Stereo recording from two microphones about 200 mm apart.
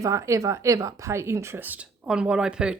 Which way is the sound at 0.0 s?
15° right (ahead or behind).